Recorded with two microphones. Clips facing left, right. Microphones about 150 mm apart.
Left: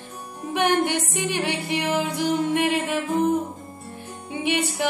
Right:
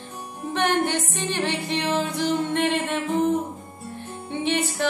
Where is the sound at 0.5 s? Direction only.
15° left (ahead or behind).